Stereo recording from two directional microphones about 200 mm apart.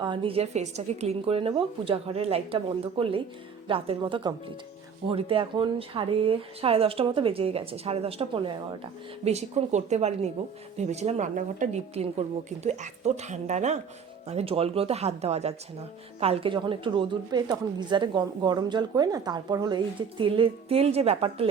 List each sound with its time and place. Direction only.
0.0 s a woman's voice: 25° right (ahead or behind)